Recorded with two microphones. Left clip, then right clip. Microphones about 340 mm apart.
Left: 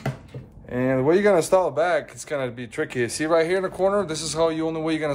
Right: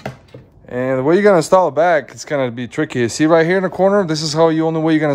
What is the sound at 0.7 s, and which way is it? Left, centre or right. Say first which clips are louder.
Speech: right 5 dB; right.